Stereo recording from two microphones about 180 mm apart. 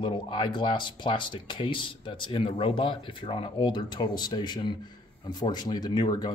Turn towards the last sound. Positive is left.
turn(degrees=25)  # may be behind; listen again after turning